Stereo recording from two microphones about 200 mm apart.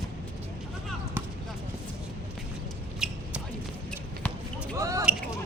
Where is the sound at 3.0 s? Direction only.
5° right (ahead or behind).